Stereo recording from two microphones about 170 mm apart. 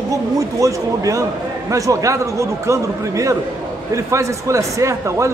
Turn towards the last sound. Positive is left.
turn(degrees=-15)  # may be behind; listen again after turning